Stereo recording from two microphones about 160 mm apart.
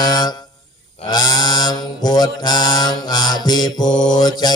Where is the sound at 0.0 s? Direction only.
25° left (ahead or behind).